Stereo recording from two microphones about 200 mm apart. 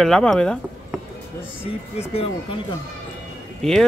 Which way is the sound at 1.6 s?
30° left (ahead or behind).